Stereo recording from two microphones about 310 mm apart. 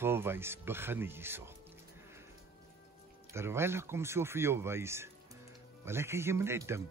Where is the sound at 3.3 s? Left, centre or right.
Centre.